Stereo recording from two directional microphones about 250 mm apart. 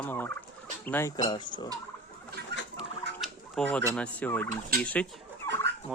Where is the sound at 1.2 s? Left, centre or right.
Centre.